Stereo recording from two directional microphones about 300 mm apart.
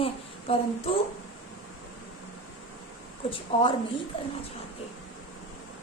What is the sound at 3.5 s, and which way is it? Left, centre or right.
Speech, centre.